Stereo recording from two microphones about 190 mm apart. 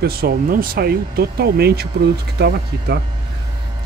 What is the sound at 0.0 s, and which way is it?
Speech, 55° right (ahead or behind).